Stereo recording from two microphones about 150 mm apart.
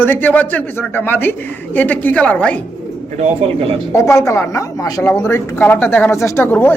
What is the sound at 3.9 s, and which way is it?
A woman's voice, 20° left (ahead or behind).